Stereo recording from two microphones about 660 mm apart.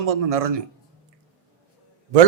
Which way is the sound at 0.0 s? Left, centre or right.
Right.